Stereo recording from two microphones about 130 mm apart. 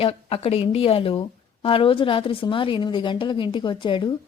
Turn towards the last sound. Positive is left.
turn(degrees=40)  # may be behind; listen again after turning